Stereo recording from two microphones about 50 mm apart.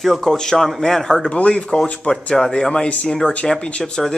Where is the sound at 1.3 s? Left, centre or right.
Left.